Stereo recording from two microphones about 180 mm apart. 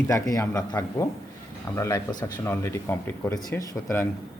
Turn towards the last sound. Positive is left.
turn(degrees=15)  # may be behind; listen again after turning